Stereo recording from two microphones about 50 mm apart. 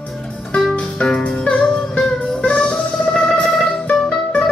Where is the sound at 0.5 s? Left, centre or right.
Centre.